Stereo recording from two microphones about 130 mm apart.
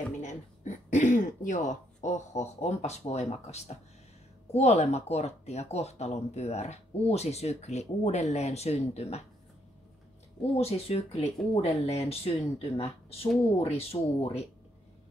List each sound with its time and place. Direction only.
0.2 s speech: 70° left (ahead or behind)
10.5 s speech: 50° left (ahead or behind)